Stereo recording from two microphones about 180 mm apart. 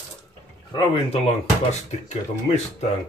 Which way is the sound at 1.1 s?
35° left (ahead or behind).